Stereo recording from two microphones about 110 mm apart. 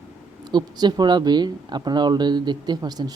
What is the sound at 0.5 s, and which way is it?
Speech, 40° right (ahead or behind).